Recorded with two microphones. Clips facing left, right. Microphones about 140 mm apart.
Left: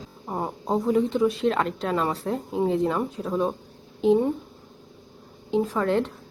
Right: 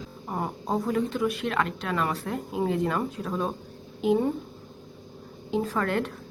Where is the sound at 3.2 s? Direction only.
15° left (ahead or behind).